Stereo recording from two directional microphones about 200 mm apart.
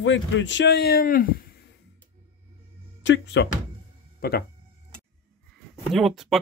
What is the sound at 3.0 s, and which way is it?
Speech, 60° left (ahead or behind).